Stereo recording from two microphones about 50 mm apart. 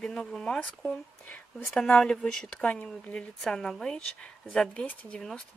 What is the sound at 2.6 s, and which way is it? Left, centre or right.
Speech, left.